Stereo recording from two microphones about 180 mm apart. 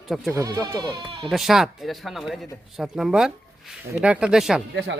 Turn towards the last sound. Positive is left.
turn(degrees=-80)